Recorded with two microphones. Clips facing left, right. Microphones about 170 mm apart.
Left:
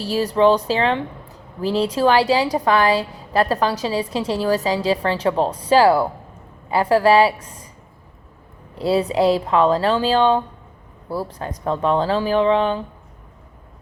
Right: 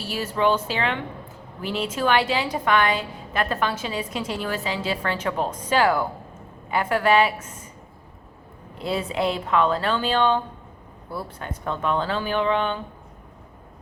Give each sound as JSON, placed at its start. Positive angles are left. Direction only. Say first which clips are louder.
{"t": 0.0, "sound": "a woman's voice", "louder": "left 7 dB", "side_deg": 35}
{"t": 8.8, "sound": "a woman's voice", "louder": "left 7 dB", "side_deg": 35}